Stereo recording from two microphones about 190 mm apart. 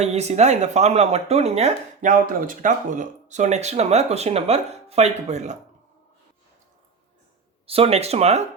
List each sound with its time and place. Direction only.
0.0 s speech: 35° right (ahead or behind)
7.7 s speech: 30° right (ahead or behind)